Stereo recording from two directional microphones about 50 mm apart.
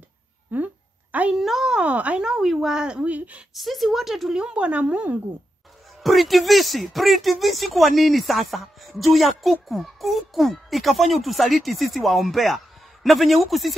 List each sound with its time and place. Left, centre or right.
0.5 s speech: right
1.3 s speech: centre
1.8 s speech: right
2.2 s speech: centre
3.0 s speech: right
3.5 s speech: centre
4.4 s speech: right
6.0 s speech: centre